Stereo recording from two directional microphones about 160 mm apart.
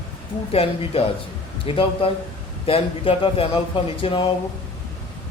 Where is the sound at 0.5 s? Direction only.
35° left (ahead or behind).